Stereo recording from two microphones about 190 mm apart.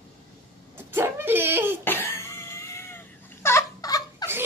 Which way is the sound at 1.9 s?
15° left (ahead or behind).